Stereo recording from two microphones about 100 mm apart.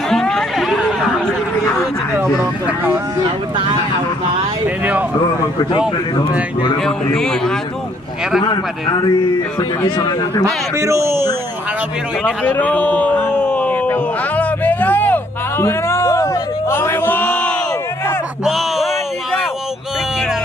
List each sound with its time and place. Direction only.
0.1 s chatter: 5° left (ahead or behind)
2.6 s speech: 15° right (ahead or behind)
7.2 s speech: 5° left (ahead or behind)
8.4 s speech: 45° left (ahead or behind)
10.4 s a man's voice: 30° right (ahead or behind)
12.2 s a sound: 10° left (ahead or behind)
18.4 s a sound: centre (ahead or behind)